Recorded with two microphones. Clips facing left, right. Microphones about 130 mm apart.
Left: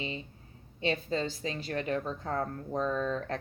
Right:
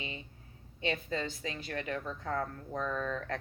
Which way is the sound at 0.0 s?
30° left (ahead or behind).